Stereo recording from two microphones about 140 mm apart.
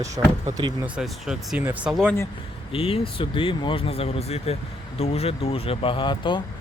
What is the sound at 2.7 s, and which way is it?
Speech, 40° left (ahead or behind).